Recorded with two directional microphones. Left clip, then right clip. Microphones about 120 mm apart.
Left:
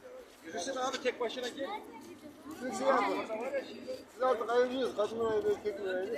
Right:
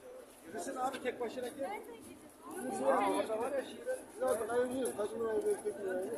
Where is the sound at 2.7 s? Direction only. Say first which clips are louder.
Left 2 dB; 15° left (ahead or behind).